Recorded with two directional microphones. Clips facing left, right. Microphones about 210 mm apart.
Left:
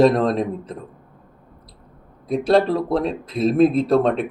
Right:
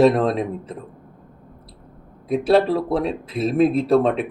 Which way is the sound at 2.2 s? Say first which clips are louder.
Even; 5° right (ahead or behind).